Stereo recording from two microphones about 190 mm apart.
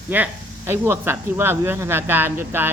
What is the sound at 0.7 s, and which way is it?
Speech, 10° right (ahead or behind).